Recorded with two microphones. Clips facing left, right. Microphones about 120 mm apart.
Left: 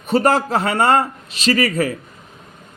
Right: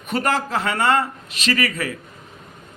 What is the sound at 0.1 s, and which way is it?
A man's voice, 35° left (ahead or behind).